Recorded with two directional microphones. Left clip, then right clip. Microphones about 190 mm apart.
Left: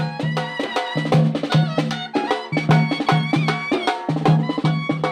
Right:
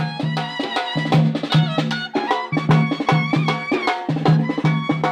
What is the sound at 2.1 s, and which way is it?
Music, 20° right (ahead or behind).